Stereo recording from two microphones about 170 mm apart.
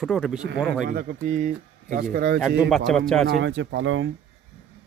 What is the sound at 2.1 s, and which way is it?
Speech, 60° right (ahead or behind).